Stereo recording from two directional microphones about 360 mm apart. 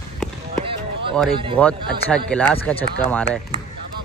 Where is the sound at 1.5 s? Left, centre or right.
Centre.